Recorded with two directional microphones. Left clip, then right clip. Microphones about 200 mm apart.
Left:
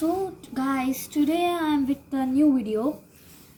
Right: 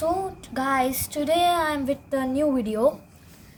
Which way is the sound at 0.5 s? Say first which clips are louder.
Right 5 dB; 55° right (ahead or behind).